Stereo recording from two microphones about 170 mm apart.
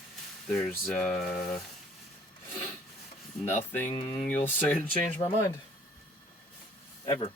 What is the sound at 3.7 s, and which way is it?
Speech, 10° left (ahead or behind).